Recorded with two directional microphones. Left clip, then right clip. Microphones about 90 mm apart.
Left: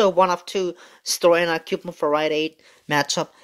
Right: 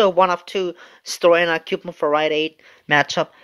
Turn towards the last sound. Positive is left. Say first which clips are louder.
# right 4 dB
turn(degrees=45)  # may be behind; listen again after turning